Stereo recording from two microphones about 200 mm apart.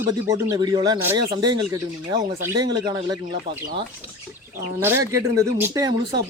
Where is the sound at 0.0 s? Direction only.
15° right (ahead or behind).